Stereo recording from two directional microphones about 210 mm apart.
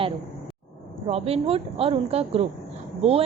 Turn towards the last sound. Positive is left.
turn(degrees=-30)  # may be behind; listen again after turning